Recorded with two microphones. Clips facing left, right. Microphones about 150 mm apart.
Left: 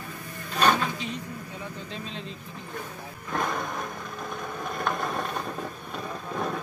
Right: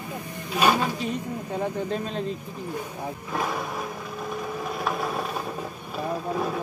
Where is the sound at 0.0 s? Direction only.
15° right (ahead or behind).